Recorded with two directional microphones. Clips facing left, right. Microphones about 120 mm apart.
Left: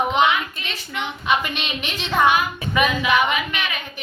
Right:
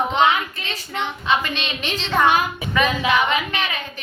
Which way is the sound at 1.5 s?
10° left (ahead or behind).